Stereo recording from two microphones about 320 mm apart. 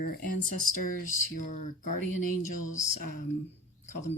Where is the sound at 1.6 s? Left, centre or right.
Left.